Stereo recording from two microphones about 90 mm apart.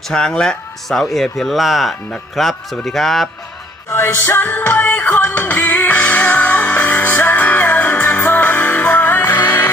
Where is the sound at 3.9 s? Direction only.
25° left (ahead or behind).